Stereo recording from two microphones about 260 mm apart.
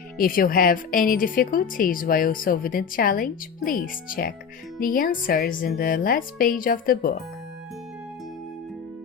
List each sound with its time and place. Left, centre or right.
0.2 s a woman's voice: left